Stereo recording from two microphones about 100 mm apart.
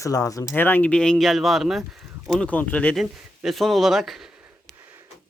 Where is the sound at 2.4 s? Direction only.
15° left (ahead or behind).